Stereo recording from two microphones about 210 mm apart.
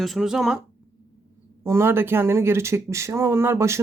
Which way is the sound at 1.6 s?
10° right (ahead or behind).